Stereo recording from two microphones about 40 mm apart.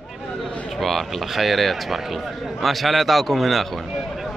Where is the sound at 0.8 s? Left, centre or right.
Centre.